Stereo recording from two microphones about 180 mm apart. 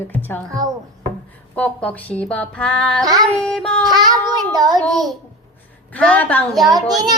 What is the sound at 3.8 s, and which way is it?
Speech, 25° right (ahead or behind).